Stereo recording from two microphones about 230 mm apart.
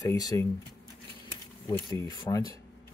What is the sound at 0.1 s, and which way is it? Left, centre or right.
Speech, centre.